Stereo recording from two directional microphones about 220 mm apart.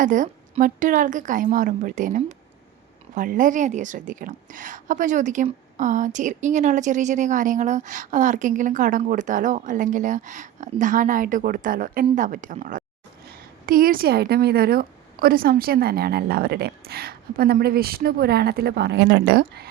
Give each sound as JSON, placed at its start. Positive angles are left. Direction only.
{"t": 0.0, "sound": "a woman's voice", "side_deg": -35}